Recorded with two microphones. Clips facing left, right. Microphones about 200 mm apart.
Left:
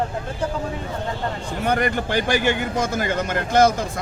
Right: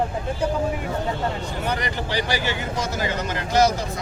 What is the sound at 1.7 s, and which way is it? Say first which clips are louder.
A man's voice: left 7 dB; 55° left (ahead or behind).